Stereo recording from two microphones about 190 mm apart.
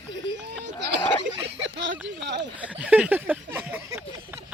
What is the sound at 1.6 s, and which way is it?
Speech, 80° right.